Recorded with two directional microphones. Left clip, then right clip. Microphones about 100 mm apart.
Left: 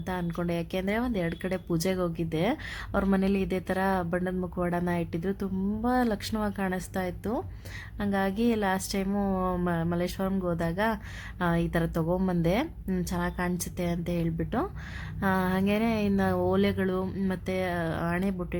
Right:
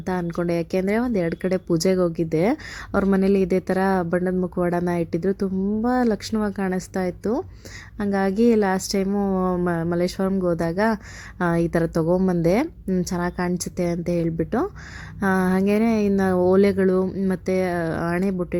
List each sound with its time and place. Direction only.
0.0 s a woman's voice: 40° right (ahead or behind)
4.9 s speech: 40° right (ahead or behind)
9.0 s speech: 20° right (ahead or behind)
9.6 s speech: 35° right (ahead or behind)
17.1 s speech: 25° right (ahead or behind)
17.3 s speech: 40° right (ahead or behind)